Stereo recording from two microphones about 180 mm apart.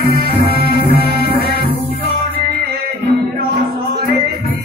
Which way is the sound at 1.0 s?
60° right (ahead or behind).